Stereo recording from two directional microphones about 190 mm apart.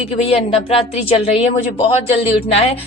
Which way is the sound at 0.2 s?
30° left (ahead or behind).